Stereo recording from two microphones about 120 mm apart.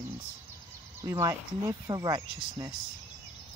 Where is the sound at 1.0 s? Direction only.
25° right (ahead or behind).